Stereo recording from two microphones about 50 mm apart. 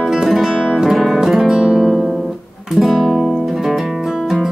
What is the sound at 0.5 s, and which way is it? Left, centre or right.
Music, centre.